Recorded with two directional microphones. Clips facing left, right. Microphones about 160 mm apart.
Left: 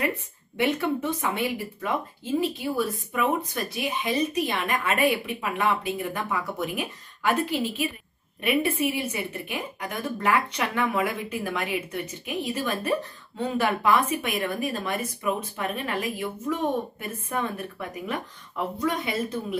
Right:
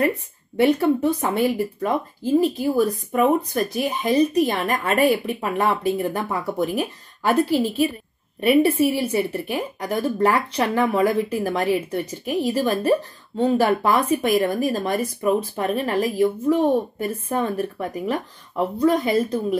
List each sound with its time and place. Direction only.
0.6 s speech: 35° right (ahead or behind)